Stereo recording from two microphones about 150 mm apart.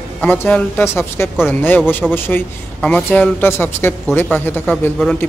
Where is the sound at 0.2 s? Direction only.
10° left (ahead or behind).